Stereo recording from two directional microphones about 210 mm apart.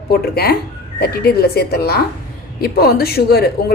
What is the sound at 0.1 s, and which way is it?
A woman's voice, 50° left (ahead or behind).